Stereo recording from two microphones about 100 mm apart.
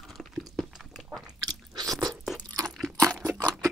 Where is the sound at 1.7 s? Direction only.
40° right (ahead or behind).